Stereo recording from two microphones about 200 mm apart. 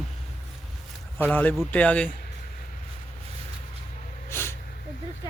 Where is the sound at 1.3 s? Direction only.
10° left (ahead or behind).